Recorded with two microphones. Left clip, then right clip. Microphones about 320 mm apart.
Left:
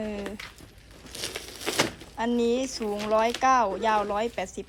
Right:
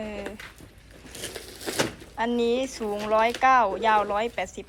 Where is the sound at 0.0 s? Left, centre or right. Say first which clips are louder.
Left 1 dB; centre.